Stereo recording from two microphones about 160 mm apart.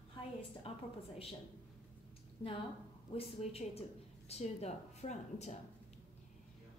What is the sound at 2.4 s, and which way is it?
A woman's voice, 30° left (ahead or behind).